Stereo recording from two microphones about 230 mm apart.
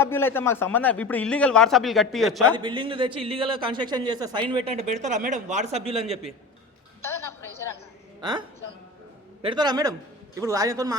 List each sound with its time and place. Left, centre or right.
0.0 s a man's voice: centre
2.6 s a man's voice: right
7.0 s a sound: centre
8.2 s a man's voice: centre